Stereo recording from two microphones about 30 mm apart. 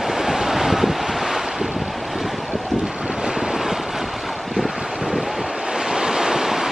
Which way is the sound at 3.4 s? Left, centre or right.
Centre.